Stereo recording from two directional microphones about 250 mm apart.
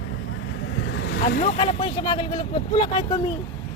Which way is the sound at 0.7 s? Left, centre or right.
Left.